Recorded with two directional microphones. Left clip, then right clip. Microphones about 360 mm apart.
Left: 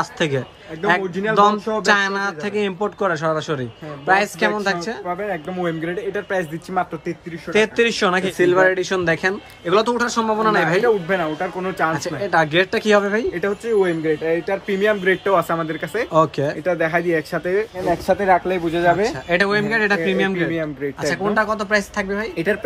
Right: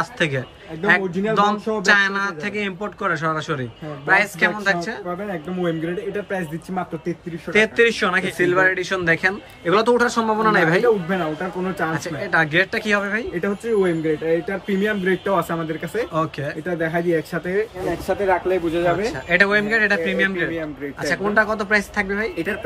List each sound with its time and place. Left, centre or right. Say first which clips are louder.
0.0 s speech: left 1 dB; centre
5.3 s speech: left 1 dB; centre
7.5 s speech: right 1 dB; centre
10.8 s speech: left 1 dB; left
11.9 s speech: left 2 dB; centre
13.3 s speech: left 2 dB; left
16.1 s speech: left 7 dB; centre
16.6 s speech: left 2 dB; left
19.0 s speech: right 1 dB; centre